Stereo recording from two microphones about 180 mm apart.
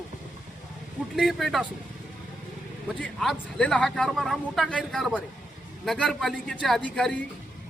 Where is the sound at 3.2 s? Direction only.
5° left (ahead or behind).